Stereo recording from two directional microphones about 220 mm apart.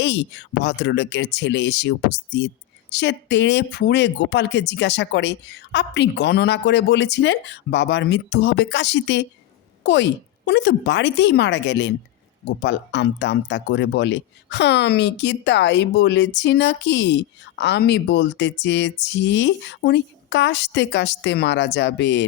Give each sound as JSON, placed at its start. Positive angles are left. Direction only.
{"t": 0.0, "sound": "speech", "side_deg": 55}